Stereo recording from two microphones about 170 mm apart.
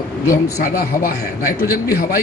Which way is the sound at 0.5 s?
60° left (ahead or behind).